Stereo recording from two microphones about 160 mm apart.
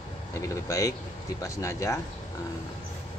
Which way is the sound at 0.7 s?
20° left (ahead or behind).